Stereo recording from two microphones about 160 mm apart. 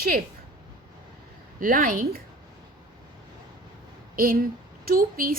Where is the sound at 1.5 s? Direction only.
60° right (ahead or behind).